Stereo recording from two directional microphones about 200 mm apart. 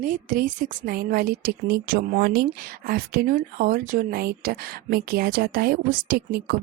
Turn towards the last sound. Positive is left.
turn(degrees=-50)  # may be behind; listen again after turning